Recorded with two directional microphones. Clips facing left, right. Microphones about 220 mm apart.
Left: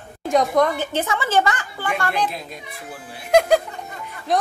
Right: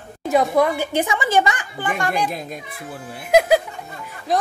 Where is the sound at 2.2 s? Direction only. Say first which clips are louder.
Right 2 dB; 50° right (ahead or behind).